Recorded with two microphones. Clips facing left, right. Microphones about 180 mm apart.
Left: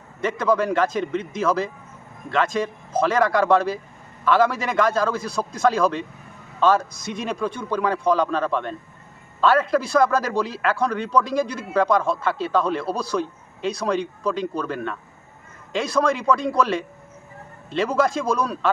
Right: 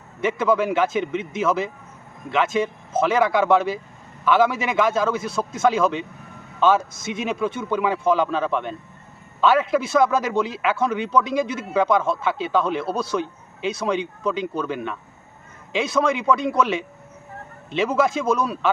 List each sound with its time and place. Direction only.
0.2 s a man's voice: 5° right (ahead or behind)